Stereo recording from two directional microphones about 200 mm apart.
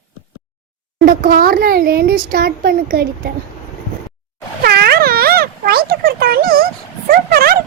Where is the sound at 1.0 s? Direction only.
45° right (ahead or behind).